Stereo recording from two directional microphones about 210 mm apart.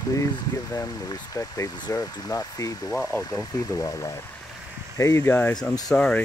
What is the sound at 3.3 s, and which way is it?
Speech, 15° left (ahead or behind).